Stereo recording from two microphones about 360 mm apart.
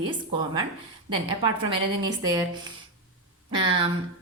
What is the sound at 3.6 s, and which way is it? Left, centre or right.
Speech, centre.